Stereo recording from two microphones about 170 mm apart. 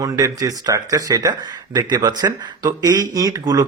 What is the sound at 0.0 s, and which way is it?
Speech, 20° right (ahead or behind).